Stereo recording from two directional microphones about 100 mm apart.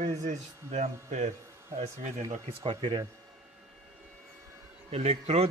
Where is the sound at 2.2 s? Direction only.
80° right; by 3.0 s 55° right (ahead or behind).